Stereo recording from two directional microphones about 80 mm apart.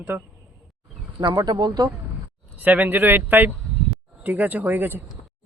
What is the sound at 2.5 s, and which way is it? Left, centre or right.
A man's voice, right.